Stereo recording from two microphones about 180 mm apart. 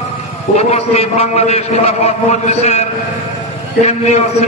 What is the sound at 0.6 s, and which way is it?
A man's voice, 35° left (ahead or behind).